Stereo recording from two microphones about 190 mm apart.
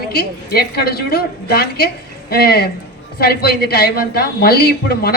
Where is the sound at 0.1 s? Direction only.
55° left (ahead or behind).